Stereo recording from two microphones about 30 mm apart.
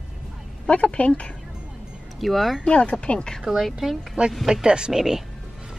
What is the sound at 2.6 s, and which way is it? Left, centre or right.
Speech, left.